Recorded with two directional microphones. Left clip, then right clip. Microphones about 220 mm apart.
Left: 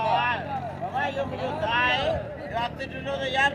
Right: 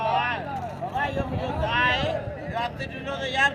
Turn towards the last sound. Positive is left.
turn(degrees=-5)  # may be behind; listen again after turning